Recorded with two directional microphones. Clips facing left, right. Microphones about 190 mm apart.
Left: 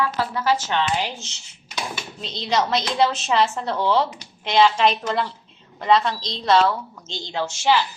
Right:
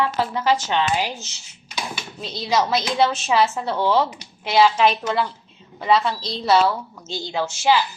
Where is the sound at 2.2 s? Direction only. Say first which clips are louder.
Right 1 dB; 5° right (ahead or behind).